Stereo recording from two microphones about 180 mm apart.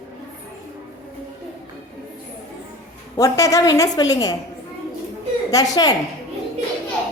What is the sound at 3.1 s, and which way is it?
A woman's voice, 15° left (ahead or behind).